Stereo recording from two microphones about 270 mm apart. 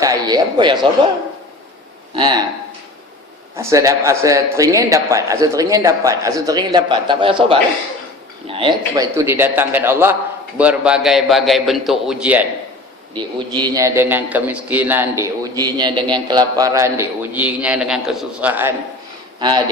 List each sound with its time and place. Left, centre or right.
0.0 s speech: centre
2.1 s a man's voice: centre
3.6 s a man's voice: centre
13.1 s a man's voice: centre